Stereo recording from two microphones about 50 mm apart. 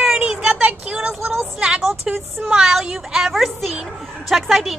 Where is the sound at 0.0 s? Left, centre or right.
Centre.